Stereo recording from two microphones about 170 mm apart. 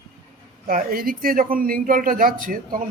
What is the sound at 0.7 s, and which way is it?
Speech, 55° right (ahead or behind).